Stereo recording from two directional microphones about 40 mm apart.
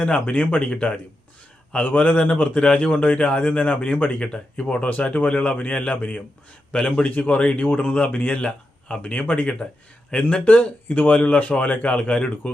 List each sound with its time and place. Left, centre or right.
0.0 s speech: left
0.7 s speech: centre
1.7 s speech: left
3.5 s speech: left
6.0 s speech: left
6.7 s a man's voice: centre
7.0 s speech: left